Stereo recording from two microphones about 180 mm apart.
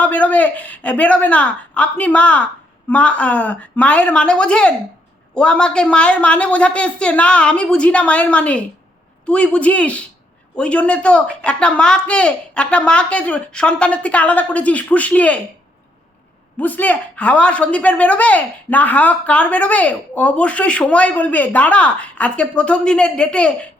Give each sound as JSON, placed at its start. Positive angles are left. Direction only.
{"t": 0.0, "sound": "speech", "side_deg": 5}
{"t": 16.6, "sound": "speech", "side_deg": 10}